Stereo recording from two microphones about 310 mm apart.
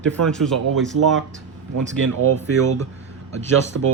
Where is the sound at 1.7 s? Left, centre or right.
Right.